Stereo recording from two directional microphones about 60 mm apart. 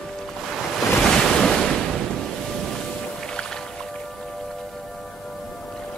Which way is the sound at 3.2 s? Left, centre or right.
Centre.